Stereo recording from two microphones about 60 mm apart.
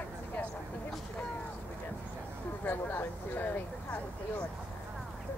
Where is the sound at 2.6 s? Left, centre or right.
Left.